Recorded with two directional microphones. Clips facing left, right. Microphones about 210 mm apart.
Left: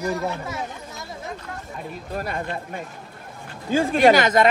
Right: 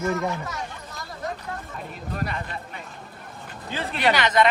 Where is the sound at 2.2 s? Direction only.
45° left (ahead or behind).